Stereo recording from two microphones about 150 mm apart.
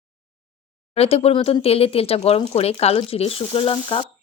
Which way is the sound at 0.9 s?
40° left (ahead or behind).